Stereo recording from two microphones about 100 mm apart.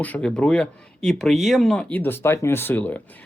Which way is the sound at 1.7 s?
15° left (ahead or behind).